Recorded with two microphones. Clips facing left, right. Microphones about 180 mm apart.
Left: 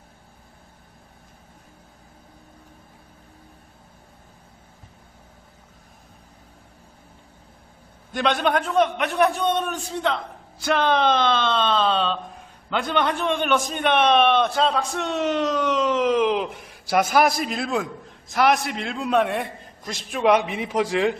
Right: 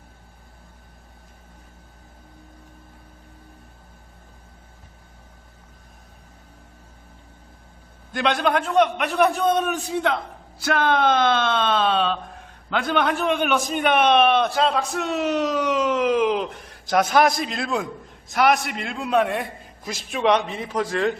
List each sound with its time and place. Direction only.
8.1 s a man's voice: centre (ahead or behind)
20.4 s a man's voice: 15° left (ahead or behind)